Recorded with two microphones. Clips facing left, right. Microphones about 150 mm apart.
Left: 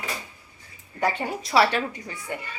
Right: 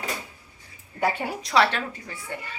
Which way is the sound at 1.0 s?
Centre (ahead or behind).